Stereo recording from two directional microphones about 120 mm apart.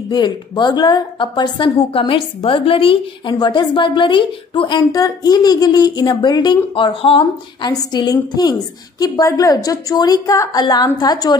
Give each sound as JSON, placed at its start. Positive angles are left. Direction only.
{"t": 0.1, "sound": "speech", "side_deg": 35}
{"t": 7.9, "sound": "speech", "side_deg": 35}